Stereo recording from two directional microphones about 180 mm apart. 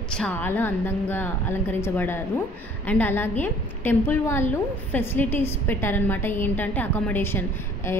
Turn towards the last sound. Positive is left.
turn(degrees=15)  # may be behind; listen again after turning